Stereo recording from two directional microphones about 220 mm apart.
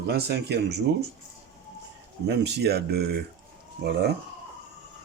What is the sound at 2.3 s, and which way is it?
Speech, 50° right (ahead or behind).